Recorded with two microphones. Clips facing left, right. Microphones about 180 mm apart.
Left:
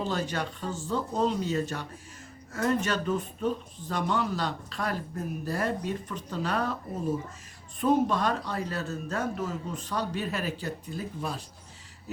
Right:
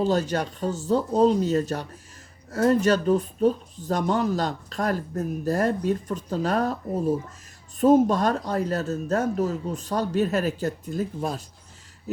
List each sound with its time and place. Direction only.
0.0 s speech: 40° right (ahead or behind)